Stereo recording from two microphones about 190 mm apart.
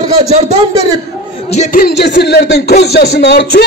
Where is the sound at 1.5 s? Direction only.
40° left (ahead or behind).